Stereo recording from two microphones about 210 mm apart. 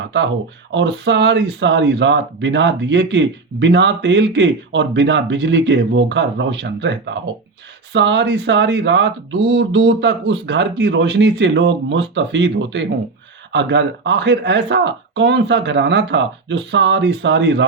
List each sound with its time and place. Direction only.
0.0 s speech: 60° right (ahead or behind)